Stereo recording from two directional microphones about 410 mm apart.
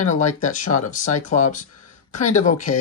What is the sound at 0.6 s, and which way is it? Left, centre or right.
Speech, left.